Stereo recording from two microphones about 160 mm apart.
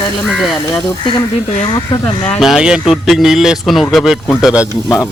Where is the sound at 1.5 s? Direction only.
45° left (ahead or behind).